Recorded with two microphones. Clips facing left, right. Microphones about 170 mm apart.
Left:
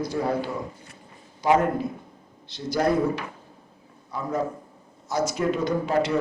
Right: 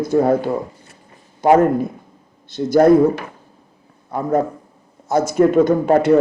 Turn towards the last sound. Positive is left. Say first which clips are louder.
# right 10 dB
turn(degrees=-50)  # may be behind; listen again after turning